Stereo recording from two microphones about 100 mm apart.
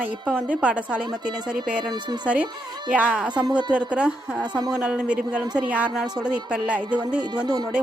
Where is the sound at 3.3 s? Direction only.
50° right (ahead or behind).